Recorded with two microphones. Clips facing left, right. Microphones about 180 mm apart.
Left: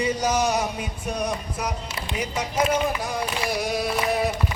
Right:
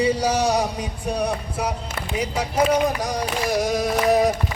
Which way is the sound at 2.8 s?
40° right (ahead or behind).